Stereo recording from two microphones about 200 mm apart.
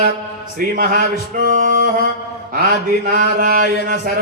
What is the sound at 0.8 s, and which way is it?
Speech, 45° right (ahead or behind).